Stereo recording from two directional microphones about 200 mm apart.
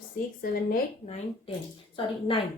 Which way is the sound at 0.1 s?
45° left (ahead or behind).